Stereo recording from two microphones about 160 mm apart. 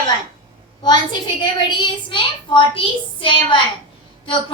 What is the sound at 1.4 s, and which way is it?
A woman's voice, 30° left (ahead or behind).